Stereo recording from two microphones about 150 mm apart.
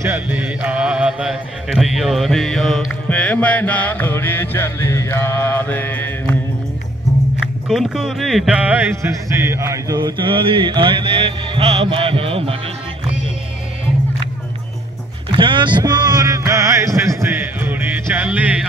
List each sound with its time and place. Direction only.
0.0 s speech: 10° right (ahead or behind); by 6.3 s 15° left (ahead or behind)
7.6 s speech: 5° right (ahead or behind); by 12.5 s 40° right (ahead or behind)
15.3 s a sound: 30° right (ahead or behind); by 18.7 s 10° right (ahead or behind)